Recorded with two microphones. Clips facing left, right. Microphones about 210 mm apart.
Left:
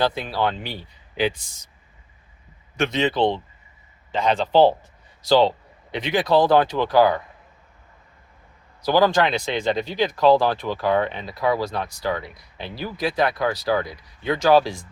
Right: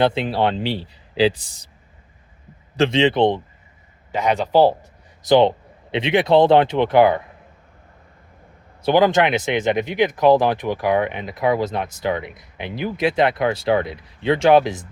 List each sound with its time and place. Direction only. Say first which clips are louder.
0.0 s speech: right 4 dB; 25° right (ahead or behind)
2.7 s speech: right 5 dB; 30° right (ahead or behind)
8.8 s speech: right 3 dB; 20° right (ahead or behind)